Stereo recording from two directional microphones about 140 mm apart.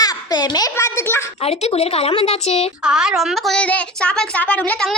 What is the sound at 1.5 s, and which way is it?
Speech, 50° left (ahead or behind).